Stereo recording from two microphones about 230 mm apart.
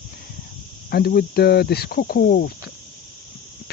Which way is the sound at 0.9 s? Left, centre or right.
Left.